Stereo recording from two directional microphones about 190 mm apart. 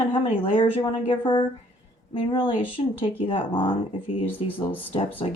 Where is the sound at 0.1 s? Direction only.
25° left (ahead or behind).